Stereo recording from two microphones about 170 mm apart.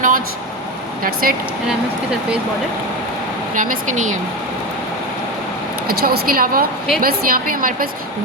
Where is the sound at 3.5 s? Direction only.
50° right (ahead or behind).